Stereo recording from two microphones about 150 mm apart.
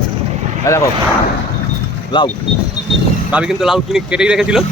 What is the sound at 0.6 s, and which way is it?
Speech, 20° left (ahead or behind).